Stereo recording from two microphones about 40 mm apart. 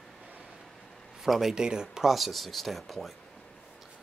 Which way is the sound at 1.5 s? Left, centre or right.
Centre.